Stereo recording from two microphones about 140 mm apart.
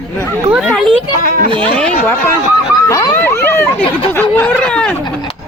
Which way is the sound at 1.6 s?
10° left (ahead or behind).